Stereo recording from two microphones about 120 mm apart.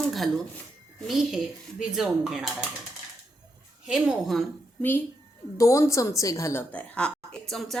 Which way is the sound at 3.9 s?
5° right (ahead or behind).